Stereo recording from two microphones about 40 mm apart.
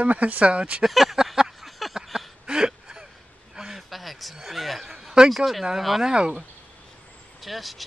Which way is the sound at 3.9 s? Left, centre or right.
Centre.